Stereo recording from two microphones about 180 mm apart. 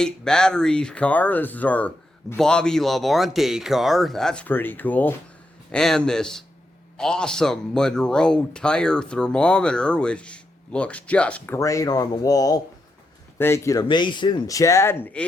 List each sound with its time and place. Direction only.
0.0 s a man's voice: 5° left (ahead or behind)